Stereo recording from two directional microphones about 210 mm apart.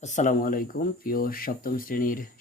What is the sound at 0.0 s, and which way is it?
Speech, 35° left (ahead or behind).